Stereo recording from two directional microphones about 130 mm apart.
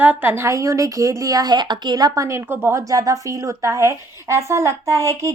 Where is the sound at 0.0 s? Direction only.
15° right (ahead or behind).